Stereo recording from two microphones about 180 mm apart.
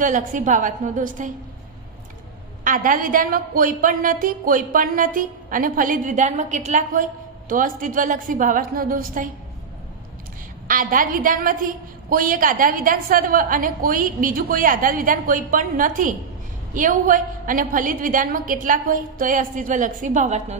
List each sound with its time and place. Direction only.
0.0 s a woman's voice: 45° right (ahead or behind)
2.6 s a woman's voice: 50° right (ahead or behind)
10.7 s a woman's voice: 50° right (ahead or behind)